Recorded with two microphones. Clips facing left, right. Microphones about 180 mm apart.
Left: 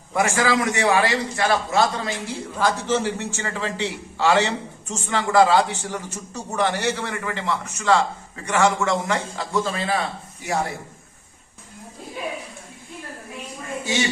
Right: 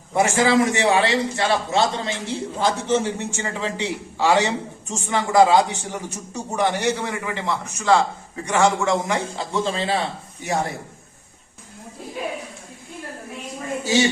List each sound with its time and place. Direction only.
0.1 s a man's voice: 25° right (ahead or behind)